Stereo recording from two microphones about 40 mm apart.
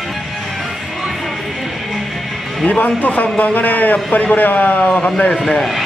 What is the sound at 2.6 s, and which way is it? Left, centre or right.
A man's voice, left.